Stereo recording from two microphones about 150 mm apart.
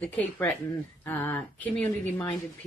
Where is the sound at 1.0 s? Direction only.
10° left (ahead or behind).